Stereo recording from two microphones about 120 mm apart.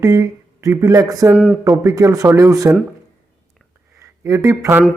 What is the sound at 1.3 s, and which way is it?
Speech, 10° right (ahead or behind).